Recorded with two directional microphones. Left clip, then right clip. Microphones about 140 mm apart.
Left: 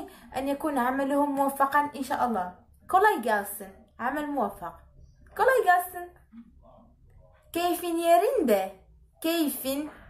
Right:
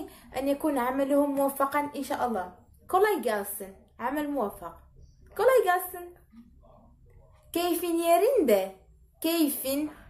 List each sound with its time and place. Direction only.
0.0 s a woman's voice: 15° right (ahead or behind)
5.3 s a sound: 15° right (ahead or behind)
7.5 s a woman's voice: 20° right (ahead or behind)